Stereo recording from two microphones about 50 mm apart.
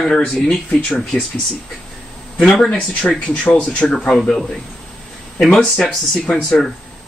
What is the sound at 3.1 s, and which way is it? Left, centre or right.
Speech, left.